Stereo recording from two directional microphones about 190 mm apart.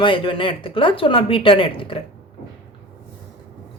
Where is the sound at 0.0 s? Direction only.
25° left (ahead or behind).